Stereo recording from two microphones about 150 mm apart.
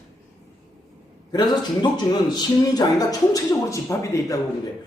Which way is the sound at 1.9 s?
25° left (ahead or behind).